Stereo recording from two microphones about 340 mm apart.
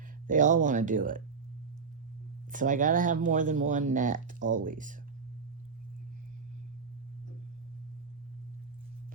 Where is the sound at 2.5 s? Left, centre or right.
Right.